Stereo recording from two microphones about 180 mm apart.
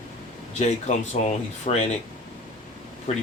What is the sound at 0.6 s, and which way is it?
Speech, 40° left (ahead or behind).